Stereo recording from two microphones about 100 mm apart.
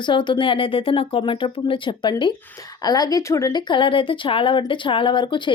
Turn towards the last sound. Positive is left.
turn(degrees=50)  # may be behind; listen again after turning